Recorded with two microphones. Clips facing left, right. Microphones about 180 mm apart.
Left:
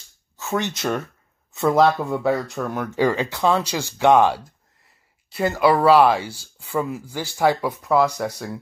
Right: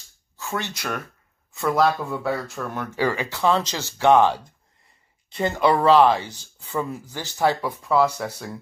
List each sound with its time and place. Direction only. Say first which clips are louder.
0.4 s speech: left 5 dB; 20° left (ahead or behind)